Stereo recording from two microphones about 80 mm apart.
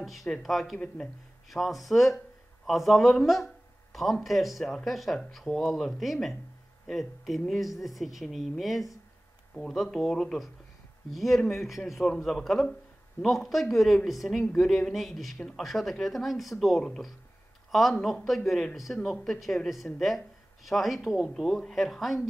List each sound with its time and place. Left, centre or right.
0.0 s speech: centre
0.7 s speech: centre
1.5 s speech: centre